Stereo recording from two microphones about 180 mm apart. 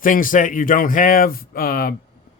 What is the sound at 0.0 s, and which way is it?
Speech, 50° left (ahead or behind).